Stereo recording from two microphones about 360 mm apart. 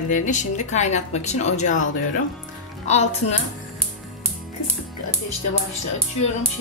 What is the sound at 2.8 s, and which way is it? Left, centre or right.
Speech, centre.